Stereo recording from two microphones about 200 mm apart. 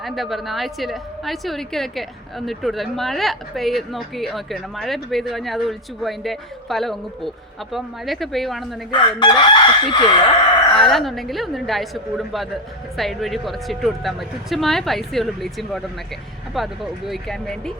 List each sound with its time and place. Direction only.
0.0 s speech: centre (ahead or behind)
8.9 s chicken: 25° left (ahead or behind)
9.9 s speech: 20° left (ahead or behind)
10.7 s speech: centre (ahead or behind)